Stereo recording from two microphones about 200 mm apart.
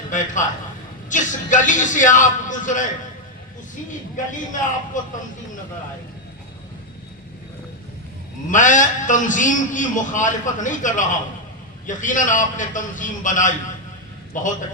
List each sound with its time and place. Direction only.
0.1 s a man's voice: 40° left (ahead or behind)
4.9 s a man's voice: 40° left (ahead or behind)
8.4 s a man's voice: 40° left (ahead or behind)